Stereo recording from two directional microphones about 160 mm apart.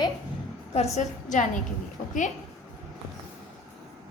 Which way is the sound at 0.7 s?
45° left (ahead or behind).